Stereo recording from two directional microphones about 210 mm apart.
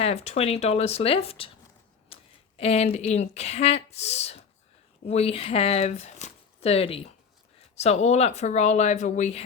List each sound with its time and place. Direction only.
0.0 s speech: 30° left (ahead or behind)
2.1 s a sound: 25° left (ahead or behind)
2.6 s speech: 30° left (ahead or behind)